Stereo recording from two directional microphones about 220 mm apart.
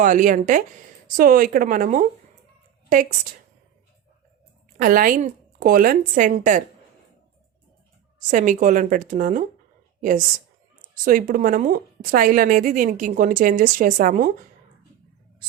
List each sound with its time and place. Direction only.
0.0 s a woman's voice: 35° right (ahead or behind)
4.8 s a woman's voice: 40° right (ahead or behind)
8.3 s a woman's voice: 35° right (ahead or behind)
10.8 s a woman's voice: 40° right (ahead or behind)